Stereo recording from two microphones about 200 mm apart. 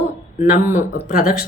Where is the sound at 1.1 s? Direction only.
45° left (ahead or behind).